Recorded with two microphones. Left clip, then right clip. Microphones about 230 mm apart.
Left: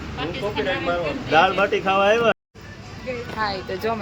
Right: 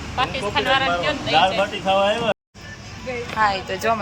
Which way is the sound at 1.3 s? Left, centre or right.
Centre.